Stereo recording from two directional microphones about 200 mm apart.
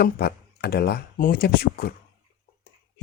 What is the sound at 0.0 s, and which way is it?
Speech, 50° left (ahead or behind).